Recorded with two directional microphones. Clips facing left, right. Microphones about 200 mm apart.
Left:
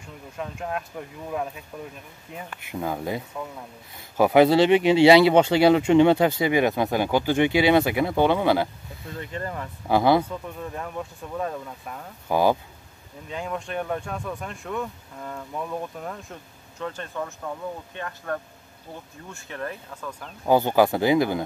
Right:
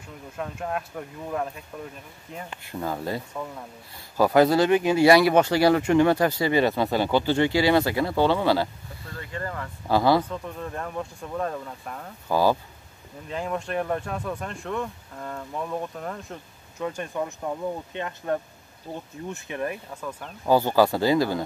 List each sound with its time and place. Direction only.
0.4 s speech: centre (ahead or behind)
2.7 s speech: 10° left (ahead or behind)
4.2 s speech: 20° left (ahead or behind)
10.2 s speech: 5° left (ahead or behind)
12.3 s speech: 20° left (ahead or behind)
13.3 s speech: centre (ahead or behind)
16.8 s speech: 10° right (ahead or behind)
20.4 s speech: 20° left (ahead or behind)